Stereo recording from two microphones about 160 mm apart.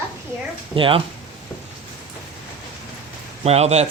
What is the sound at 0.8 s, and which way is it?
Speech, 35° right (ahead or behind).